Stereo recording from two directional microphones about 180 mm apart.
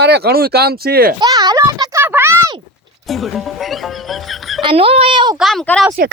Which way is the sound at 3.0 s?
Centre (ahead or behind).